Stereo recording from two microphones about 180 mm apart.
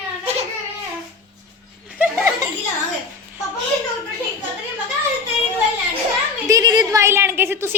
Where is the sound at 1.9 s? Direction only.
10° right (ahead or behind).